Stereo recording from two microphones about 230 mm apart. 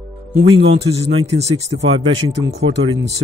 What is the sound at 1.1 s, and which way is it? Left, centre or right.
Speech, right.